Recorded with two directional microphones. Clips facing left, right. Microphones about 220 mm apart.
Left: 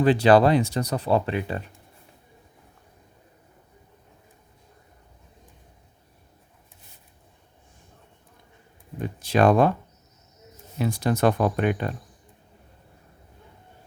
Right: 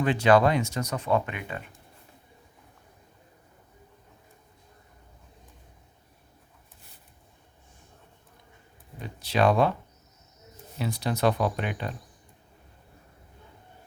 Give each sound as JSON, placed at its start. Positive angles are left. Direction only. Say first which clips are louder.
{"t": 0.0, "sound": "speech", "louder": "left 4 dB", "side_deg": 35}
{"t": 9.0, "sound": "speech", "louder": "left 4 dB", "side_deg": 50}
{"t": 10.8, "sound": "speech", "louder": "left 5 dB", "side_deg": 50}